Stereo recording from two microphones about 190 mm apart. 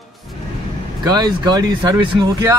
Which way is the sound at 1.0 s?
20° right (ahead or behind).